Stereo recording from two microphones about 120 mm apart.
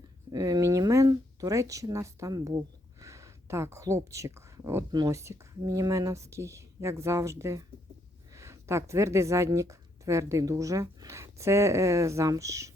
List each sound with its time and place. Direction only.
0.3 s a woman's voice: 30° right (ahead or behind)